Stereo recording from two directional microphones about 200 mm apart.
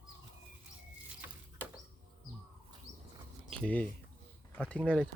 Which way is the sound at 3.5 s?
5° left (ahead or behind).